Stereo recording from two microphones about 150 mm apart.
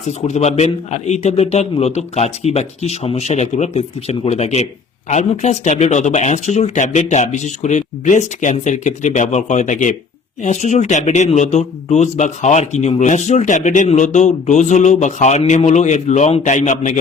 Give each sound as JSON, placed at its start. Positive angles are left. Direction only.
{"t": 0.3, "sound": "speech", "side_deg": 45}